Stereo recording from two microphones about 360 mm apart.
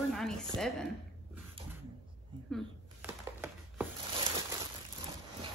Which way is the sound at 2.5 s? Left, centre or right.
Centre.